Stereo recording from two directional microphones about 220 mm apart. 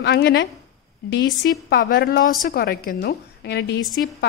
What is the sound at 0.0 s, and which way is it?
A woman's voice, 50° left (ahead or behind).